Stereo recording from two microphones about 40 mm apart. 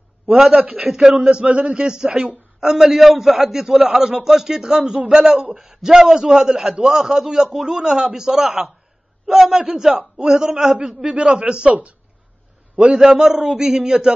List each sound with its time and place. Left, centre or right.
0.9 s a man's voice: right
1.9 s a man's voice: centre
11.1 s a man's voice: right
12.7 s a man's voice: right
13.0 s a man's voice: right